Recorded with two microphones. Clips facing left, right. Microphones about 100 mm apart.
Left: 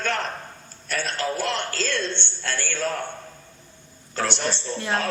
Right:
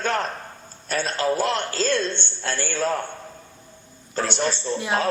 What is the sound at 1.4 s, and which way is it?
Speech, 10° right (ahead or behind).